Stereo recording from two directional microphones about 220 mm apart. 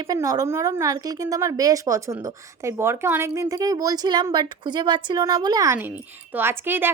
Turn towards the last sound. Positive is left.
turn(degrees=-10)  # may be behind; listen again after turning